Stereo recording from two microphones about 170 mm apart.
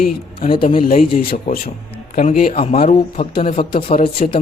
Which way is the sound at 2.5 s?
35° left (ahead or behind).